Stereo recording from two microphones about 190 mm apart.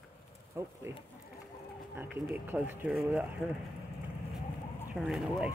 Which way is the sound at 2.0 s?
10° right (ahead or behind).